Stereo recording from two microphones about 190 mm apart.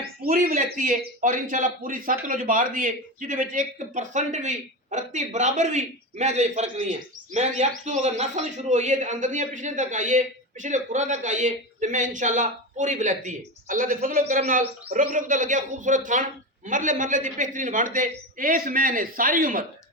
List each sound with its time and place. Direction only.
0.3 s a man's voice: 45° right (ahead or behind)